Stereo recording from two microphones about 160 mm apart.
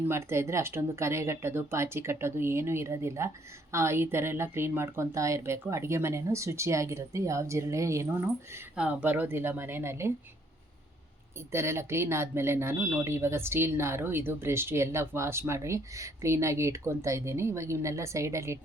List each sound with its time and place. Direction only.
0.1 s speech: 15° right (ahead or behind)
11.5 s speech: 15° right (ahead or behind)